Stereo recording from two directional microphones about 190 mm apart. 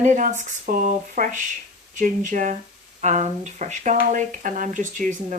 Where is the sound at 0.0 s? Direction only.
40° right (ahead or behind).